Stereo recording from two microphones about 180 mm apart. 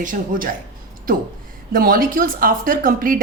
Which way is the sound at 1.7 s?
55° right (ahead or behind).